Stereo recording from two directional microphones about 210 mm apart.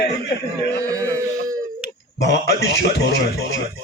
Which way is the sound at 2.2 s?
55° left (ahead or behind).